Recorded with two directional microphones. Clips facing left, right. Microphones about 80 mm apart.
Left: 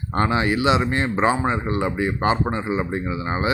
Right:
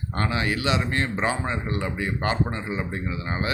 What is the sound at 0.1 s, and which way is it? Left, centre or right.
Speech, left.